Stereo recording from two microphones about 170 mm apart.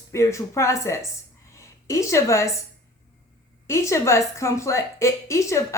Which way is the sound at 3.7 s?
15° left (ahead or behind).